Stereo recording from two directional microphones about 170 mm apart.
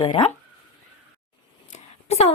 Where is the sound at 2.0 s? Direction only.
40° left (ahead or behind).